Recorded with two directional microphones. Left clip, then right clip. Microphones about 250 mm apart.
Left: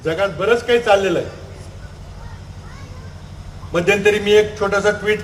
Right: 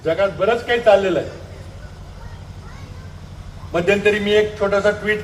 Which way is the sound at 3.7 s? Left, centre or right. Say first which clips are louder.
Left 1 dB; left.